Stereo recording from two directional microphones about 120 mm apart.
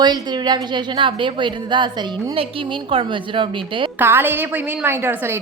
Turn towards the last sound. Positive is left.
turn(degrees=-20)  # may be behind; listen again after turning